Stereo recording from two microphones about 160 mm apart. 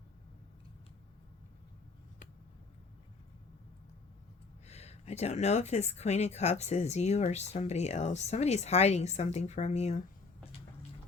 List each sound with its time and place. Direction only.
4.6 s speech: 40° left (ahead or behind)